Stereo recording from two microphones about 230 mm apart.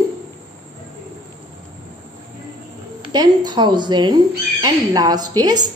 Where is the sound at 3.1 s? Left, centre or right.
Centre.